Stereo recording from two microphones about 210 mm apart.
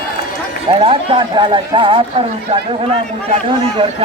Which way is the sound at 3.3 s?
25° right (ahead or behind).